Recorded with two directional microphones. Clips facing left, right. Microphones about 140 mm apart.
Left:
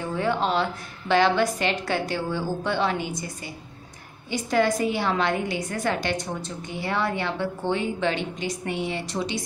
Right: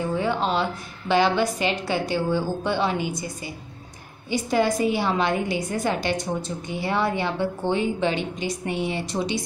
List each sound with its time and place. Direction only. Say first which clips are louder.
0.2 s a woman's voice: left 3 dB; centre (ahead or behind)
4.3 s a woman's voice: right 1 dB; 15° right (ahead or behind)